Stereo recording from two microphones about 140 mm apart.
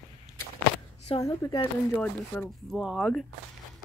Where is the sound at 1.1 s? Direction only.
45° left (ahead or behind).